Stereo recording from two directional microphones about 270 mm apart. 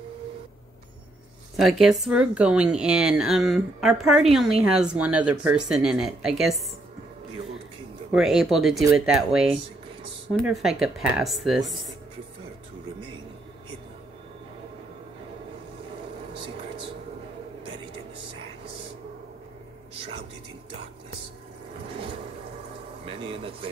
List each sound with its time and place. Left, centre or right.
1.6 s speech: centre
8.1 s speech: centre
23.0 s a sound: centre